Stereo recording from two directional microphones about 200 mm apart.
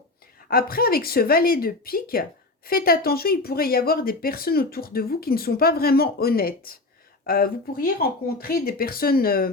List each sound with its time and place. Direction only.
0.5 s speech: 50° left (ahead or behind)